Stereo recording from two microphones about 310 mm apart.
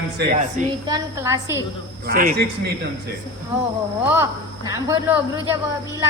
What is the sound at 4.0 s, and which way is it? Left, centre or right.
A man's voice, centre.